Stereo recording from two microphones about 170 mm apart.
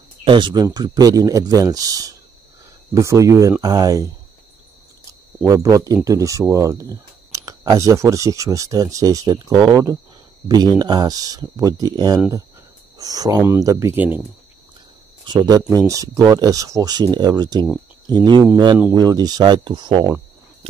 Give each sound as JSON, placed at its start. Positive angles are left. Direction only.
{"t": 0.2, "sound": "speech", "side_deg": -30}
{"t": 5.4, "sound": "speech", "side_deg": -20}
{"t": 15.2, "sound": "speech", "side_deg": -25}